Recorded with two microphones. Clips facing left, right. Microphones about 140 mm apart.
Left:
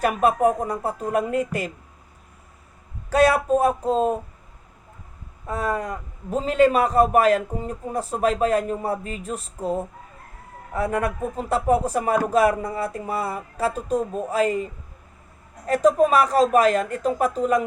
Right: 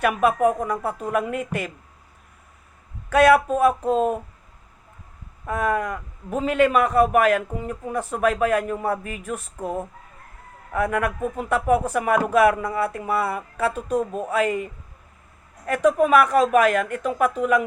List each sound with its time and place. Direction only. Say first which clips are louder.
0.0 s a man's voice: even; 40° left (ahead or behind)
3.1 s a man's voice: right 2 dB; 35° left (ahead or behind)
5.5 s a man's voice: right 2 dB; 35° left (ahead or behind)
10.8 s a man's voice: right 1 dB; 35° left (ahead or behind)